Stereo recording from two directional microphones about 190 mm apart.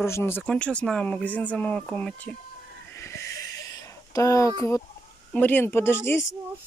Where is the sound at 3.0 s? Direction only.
15° left (ahead or behind).